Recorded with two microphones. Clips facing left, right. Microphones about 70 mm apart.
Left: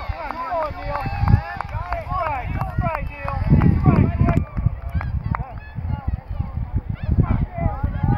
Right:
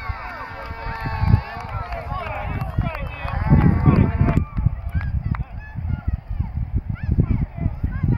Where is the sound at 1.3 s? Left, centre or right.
Left.